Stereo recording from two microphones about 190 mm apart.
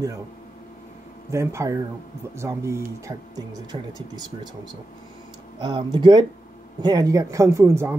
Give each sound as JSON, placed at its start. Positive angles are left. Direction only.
{"t": 1.3, "sound": "speech", "side_deg": -15}
{"t": 5.6, "sound": "speech", "side_deg": -25}